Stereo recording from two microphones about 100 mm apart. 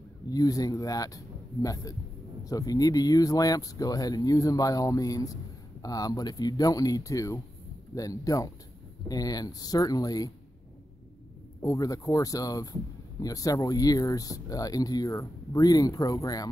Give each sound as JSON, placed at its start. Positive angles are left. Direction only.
{"t": 0.3, "sound": "speech", "side_deg": 35}
{"t": 11.6, "sound": "speech", "side_deg": 35}